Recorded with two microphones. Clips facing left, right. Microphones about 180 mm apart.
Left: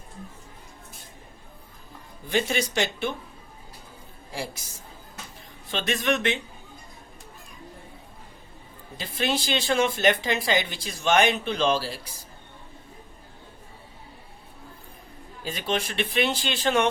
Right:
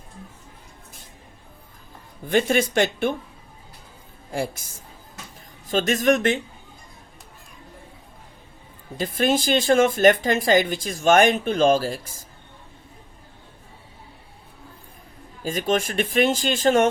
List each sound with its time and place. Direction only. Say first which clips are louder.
2.2 s speech: right 6 dB; 50° right (ahead or behind)
4.3 s speech: right 7 dB; 50° right (ahead or behind)
9.0 s speech: right 6 dB; 45° right (ahead or behind)
15.4 s speech: right 6 dB; 45° right (ahead or behind)